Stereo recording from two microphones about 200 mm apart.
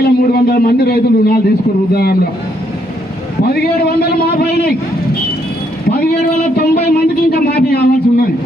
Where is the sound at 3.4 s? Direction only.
50° left (ahead or behind).